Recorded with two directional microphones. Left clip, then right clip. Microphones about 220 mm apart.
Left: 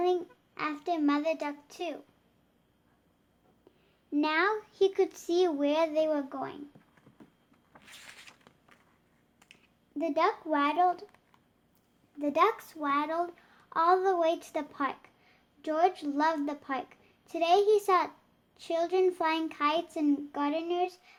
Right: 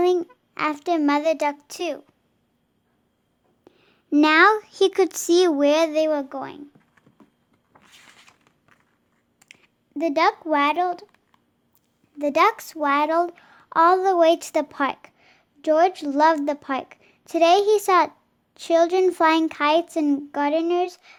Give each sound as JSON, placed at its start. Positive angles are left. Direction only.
{"t": 0.0, "sound": "a child's voice", "side_deg": -50}
{"t": 3.7, "sound": "a sound", "side_deg": -35}
{"t": 4.1, "sound": "a child's voice", "side_deg": -40}
{"t": 9.4, "sound": "clicking", "side_deg": -30}
{"t": 10.0, "sound": "a child's voice", "side_deg": -40}
{"t": 12.2, "sound": "a child's voice", "side_deg": -40}